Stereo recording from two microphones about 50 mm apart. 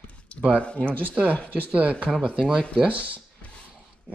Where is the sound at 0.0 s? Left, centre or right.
Left.